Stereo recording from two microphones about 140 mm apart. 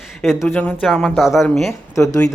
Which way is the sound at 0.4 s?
10° left (ahead or behind).